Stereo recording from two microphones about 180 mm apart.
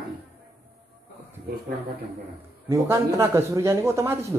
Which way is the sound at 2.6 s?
15° right (ahead or behind).